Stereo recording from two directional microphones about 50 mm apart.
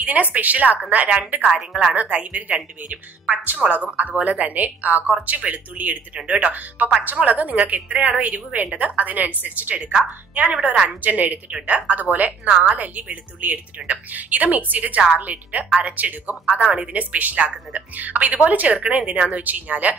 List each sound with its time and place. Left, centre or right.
0.0 s a woman's voice: right
1.4 s a woman's voice: centre
2.0 s a woman's voice: right
10.5 s a woman's voice: centre
11.0 s a woman's voice: right